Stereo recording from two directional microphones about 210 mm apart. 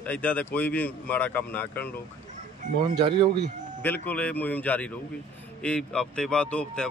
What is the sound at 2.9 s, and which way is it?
Speech, 25° right (ahead or behind).